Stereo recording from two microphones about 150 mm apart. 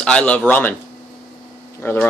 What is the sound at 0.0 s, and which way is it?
Speech, 10° left (ahead or behind).